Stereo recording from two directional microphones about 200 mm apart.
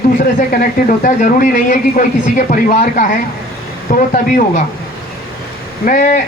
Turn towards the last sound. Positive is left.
turn(degrees=40)  # may be behind; listen again after turning